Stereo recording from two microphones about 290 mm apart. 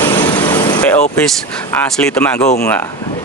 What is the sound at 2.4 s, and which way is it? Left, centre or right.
Speech, left.